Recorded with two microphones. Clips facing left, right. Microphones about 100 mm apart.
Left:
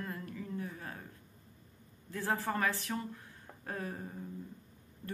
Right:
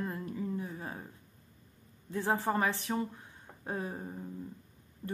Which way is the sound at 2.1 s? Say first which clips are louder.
Right 4 dB; 20° right (ahead or behind).